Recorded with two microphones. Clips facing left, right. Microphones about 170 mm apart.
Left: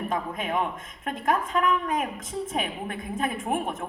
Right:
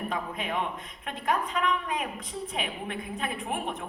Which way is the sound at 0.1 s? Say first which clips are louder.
Left 4 dB; 45° left (ahead or behind).